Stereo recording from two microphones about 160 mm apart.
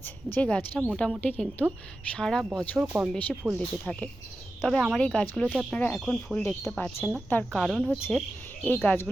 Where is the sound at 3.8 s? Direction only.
5° left (ahead or behind).